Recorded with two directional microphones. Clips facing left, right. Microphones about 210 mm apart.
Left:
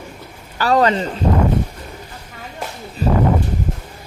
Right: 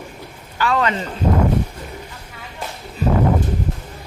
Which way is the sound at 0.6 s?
35° left (ahead or behind).